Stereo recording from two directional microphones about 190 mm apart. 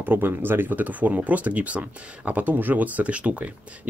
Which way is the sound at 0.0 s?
10° right (ahead or behind).